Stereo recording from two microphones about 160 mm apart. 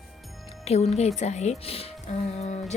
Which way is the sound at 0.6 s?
40° left (ahead or behind).